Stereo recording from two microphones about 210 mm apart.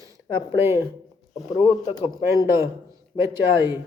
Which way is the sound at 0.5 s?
10° right (ahead or behind).